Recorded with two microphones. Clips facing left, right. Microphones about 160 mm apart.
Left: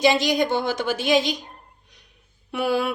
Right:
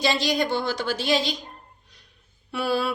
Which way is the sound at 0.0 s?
20° left (ahead or behind).